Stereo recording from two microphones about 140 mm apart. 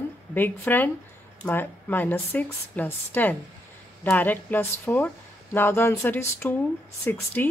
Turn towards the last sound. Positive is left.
turn(degrees=15)  # may be behind; listen again after turning